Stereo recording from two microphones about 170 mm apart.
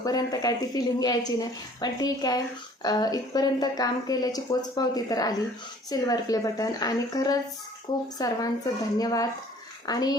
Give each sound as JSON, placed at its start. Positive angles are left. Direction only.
{"t": 0.0, "sound": "a woman's voice", "side_deg": 20}